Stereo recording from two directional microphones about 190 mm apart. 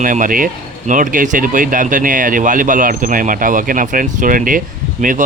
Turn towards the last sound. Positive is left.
turn(degrees=-45)  # may be behind; listen again after turning